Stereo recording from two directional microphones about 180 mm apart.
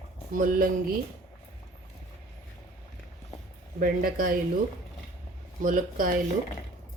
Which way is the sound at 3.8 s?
50° right (ahead or behind).